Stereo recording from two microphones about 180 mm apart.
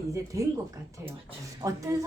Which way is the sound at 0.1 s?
15° right (ahead or behind).